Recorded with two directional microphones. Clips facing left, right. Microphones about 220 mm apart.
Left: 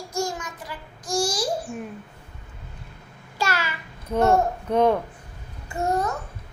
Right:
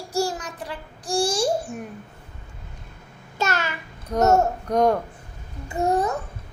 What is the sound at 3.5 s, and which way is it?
Child singing, 10° left (ahead or behind).